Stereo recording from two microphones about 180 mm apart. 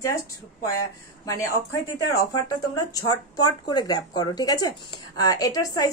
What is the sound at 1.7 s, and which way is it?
Speech, 20° left (ahead or behind).